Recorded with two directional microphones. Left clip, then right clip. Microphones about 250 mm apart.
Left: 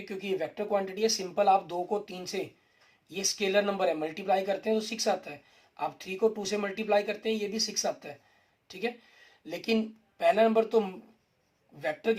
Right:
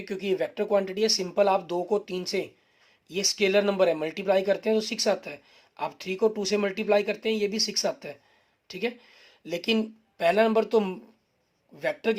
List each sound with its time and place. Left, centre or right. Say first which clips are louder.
0.0 s speech: right 5 dB; right